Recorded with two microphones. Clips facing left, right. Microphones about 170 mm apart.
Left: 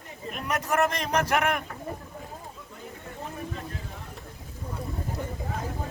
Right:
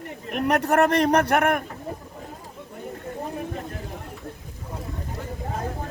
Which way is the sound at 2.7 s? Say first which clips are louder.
Right 9 dB; 60° right (ahead or behind).